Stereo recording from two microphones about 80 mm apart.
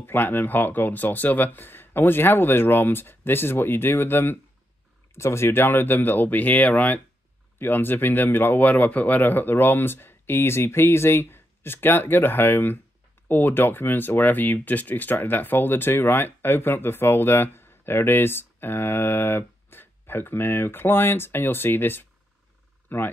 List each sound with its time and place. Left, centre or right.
0.0 s speech: left